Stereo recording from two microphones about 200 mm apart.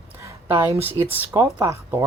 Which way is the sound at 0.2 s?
15° right (ahead or behind).